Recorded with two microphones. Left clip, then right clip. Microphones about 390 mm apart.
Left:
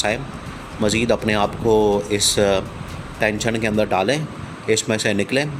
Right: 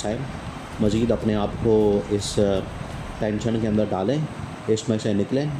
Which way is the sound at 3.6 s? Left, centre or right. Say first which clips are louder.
Left 6 dB; left.